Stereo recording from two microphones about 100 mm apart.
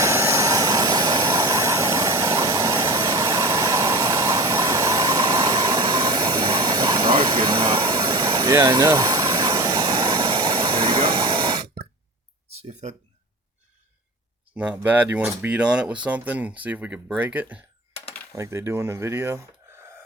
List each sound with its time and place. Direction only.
0.0 s vehicle: 30° right (ahead or behind); by 11.8 s 50° right (ahead or behind)
14.5 s speech: 20° right (ahead or behind)
18.3 s speech: 25° right (ahead or behind)